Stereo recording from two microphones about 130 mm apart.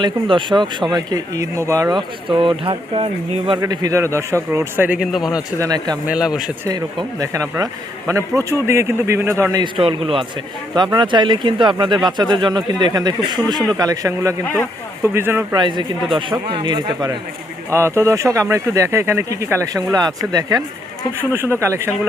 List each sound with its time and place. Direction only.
0.0 s speech: 40° right (ahead or behind); by 1.9 s 25° right (ahead or behind)
1.9 s speech: 35° right (ahead or behind)
3.6 s speech: 25° right (ahead or behind)
4.9 s speech: 5° right (ahead or behind)
5.5 s speech: 30° right (ahead or behind)
6.1 s speech: 5° right (ahead or behind)
6.7 s speech: 25° right (ahead or behind)
9.6 s a man's voice: 40° right (ahead or behind); by 14.3 s 25° right (ahead or behind)
14.4 s speech: 15° left (ahead or behind)
15.0 s speech: 20° right (ahead or behind)
15.5 s speech: 35° right (ahead or behind)
17.7 s speech: 20° right (ahead or behind)
21.2 s speech: 15° right (ahead or behind)